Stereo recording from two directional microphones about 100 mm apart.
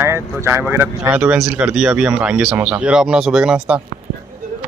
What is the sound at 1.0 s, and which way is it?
A man's voice, 10° right (ahead or behind).